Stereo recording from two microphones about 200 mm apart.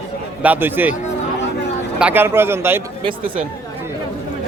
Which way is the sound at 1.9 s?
10° right (ahead or behind).